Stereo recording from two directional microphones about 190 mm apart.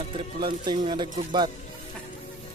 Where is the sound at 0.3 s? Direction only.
25° right (ahead or behind).